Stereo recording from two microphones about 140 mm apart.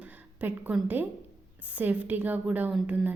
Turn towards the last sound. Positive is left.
turn(degrees=-10)  # may be behind; listen again after turning